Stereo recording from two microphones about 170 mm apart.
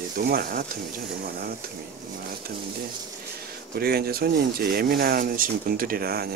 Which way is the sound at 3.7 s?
65° right (ahead or behind).